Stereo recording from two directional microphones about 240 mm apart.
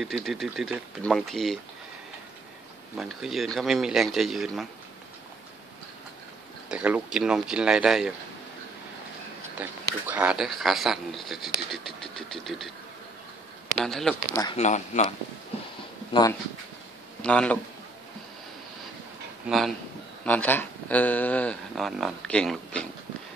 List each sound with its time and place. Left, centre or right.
0.0 s speech: centre
3.0 s speech: centre
6.7 s speech: centre
10.0 s speech: centre
13.8 s speech: centre
14.4 s speech: left
16.1 s speech: centre
17.2 s a man's voice: centre
19.4 s speech: centre